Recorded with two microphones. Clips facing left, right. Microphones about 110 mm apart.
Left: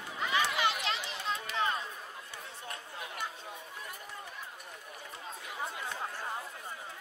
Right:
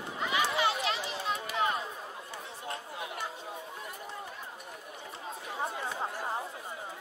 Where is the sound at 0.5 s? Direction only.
30° right (ahead or behind).